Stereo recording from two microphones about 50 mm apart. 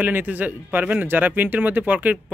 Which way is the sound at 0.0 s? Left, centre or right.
Right.